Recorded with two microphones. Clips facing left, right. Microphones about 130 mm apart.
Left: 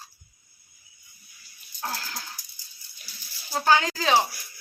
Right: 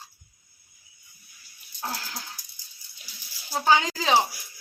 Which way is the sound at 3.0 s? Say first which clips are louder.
Even; 20° right (ahead or behind).